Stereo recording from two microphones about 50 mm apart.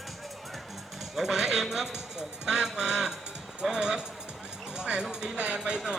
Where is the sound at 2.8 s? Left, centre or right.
Centre.